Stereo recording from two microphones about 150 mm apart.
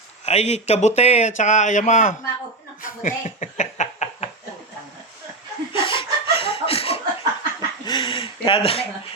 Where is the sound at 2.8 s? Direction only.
60° left (ahead or behind).